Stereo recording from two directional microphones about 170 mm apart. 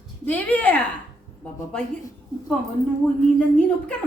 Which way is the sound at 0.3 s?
10° left (ahead or behind).